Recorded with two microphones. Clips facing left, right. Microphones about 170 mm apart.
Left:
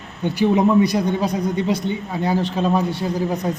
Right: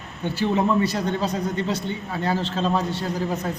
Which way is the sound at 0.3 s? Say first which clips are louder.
Left 5 dB; 15° left (ahead or behind).